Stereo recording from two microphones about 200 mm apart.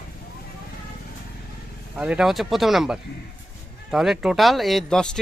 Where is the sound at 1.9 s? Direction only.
5° right (ahead or behind).